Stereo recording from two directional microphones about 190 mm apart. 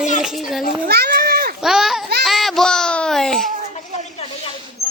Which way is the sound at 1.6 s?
Centre (ahead or behind).